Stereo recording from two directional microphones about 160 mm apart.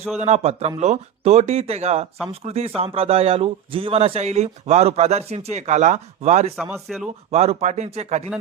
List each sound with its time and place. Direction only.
0.2 s a man's voice: 45° right (ahead or behind)
6.7 s speech: centre (ahead or behind)
7.3 s speech: 40° right (ahead or behind)